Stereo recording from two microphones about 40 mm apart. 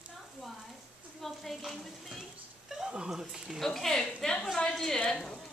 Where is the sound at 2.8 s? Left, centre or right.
Centre.